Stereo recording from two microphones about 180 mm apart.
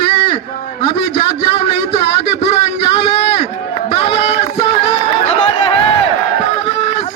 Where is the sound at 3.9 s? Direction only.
35° left (ahead or behind).